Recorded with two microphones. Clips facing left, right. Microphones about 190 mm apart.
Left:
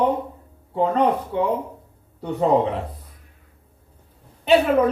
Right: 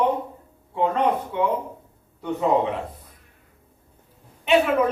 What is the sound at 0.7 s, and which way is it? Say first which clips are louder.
Speech: left 2 dB; 35° left (ahead or behind).